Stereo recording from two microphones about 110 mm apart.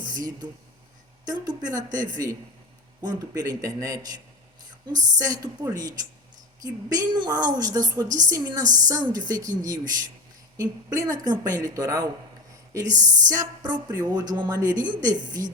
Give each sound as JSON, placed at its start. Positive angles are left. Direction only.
{"t": 1.2, "sound": "a woman's voice", "side_deg": -35}